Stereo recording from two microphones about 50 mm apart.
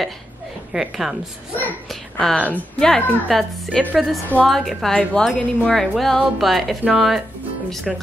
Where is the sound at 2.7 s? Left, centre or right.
Centre.